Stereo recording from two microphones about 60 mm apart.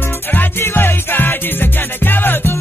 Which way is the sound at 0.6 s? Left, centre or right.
Left.